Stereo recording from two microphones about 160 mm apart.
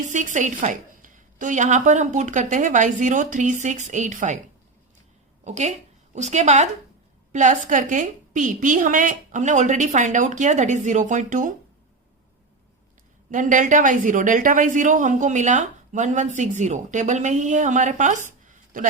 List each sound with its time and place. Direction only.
0.1 s a woman's voice: 50° right (ahead or behind)
5.5 s a woman's voice: 45° right (ahead or behind)
13.3 s a woman's voice: 50° right (ahead or behind)